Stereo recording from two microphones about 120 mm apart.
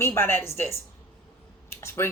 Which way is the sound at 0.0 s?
20° left (ahead or behind).